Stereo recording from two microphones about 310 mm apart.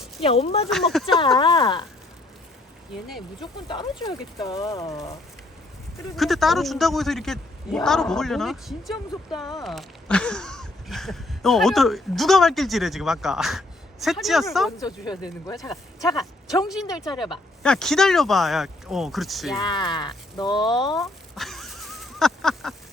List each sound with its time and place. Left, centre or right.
0.2 s speech: centre
0.7 s a man's voice: centre
1.4 s speech: centre
2.9 s a man's voice: centre
3.4 s speech: centre
6.1 s a man's voice: centre
14.8 s speech: centre
15.5 s a man's voice: centre
16.8 s speech: centre
17.6 s a man's voice: centre
19.7 s speech: centre
20.9 s a sound: centre